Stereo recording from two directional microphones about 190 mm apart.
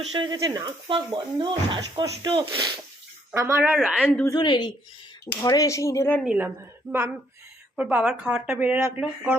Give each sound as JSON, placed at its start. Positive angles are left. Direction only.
{"t": 0.0, "sound": "a woman's voice", "side_deg": -25}
{"t": 4.3, "sound": "speech", "side_deg": 25}
{"t": 6.2, "sound": "speech", "side_deg": -10}